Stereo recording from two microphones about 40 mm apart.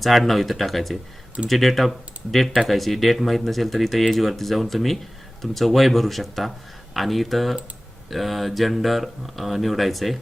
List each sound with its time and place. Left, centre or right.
0.0 s speech: centre